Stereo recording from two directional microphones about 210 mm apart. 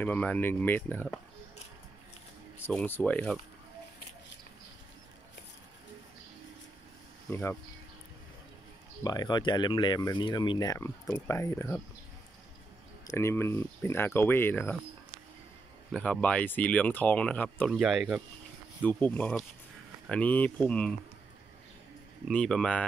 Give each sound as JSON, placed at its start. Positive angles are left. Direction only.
{"t": 0.0, "sound": "speech", "side_deg": 5}
{"t": 2.6, "sound": "speech", "side_deg": 10}
{"t": 7.2, "sound": "speech", "side_deg": 10}
{"t": 9.0, "sound": "speech", "side_deg": 20}
{"t": 13.0, "sound": "speech", "side_deg": 15}
{"t": 15.9, "sound": "speech", "side_deg": 5}
{"t": 22.3, "sound": "speech", "side_deg": 5}